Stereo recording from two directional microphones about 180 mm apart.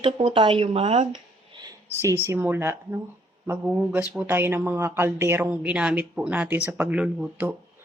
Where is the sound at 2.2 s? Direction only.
10° right (ahead or behind).